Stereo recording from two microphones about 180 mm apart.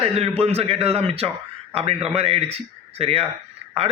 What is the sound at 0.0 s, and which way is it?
A man's voice, 35° right (ahead or behind).